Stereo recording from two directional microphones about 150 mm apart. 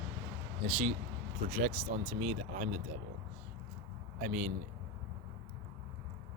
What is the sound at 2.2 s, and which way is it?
Speech, 55° right (ahead or behind).